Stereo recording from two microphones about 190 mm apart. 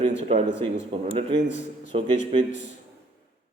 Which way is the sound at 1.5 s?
40° left (ahead or behind).